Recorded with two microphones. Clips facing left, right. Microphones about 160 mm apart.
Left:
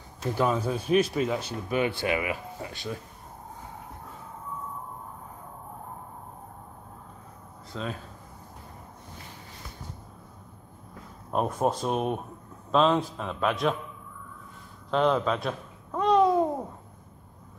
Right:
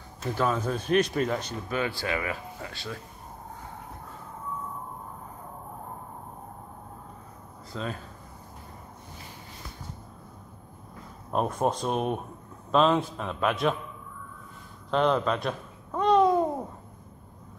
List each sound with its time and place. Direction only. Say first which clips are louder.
0.3 s speech: left 1 dB; 15° left (ahead or behind)
1.8 s speech: left 3 dB; 20° left (ahead or behind)
7.7 s speech: even; centre (ahead or behind)
11.3 s a man's voice: even; 5° left (ahead or behind)
14.9 s babbling: even; centre (ahead or behind)